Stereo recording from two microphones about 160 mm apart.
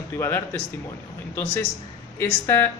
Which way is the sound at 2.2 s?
15° left (ahead or behind).